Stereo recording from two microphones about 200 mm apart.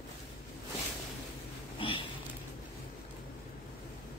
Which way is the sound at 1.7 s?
25° left (ahead or behind).